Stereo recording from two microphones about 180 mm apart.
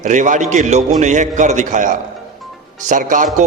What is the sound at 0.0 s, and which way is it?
A man's voice, 45° right (ahead or behind).